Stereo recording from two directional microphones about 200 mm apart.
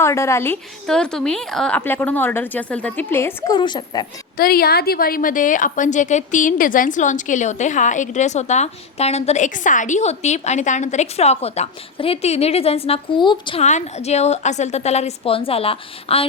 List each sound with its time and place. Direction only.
0.0 s a woman's voice: 15° left (ahead or behind)
4.4 s a woman's voice: 50° left (ahead or behind); by 16.2 s 30° left (ahead or behind)